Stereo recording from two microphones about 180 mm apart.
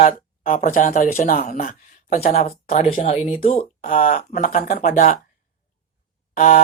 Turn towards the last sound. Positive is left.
turn(degrees=50)  # may be behind; listen again after turning